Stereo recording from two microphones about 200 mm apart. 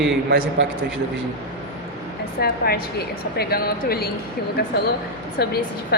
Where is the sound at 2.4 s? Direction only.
50° left (ahead or behind).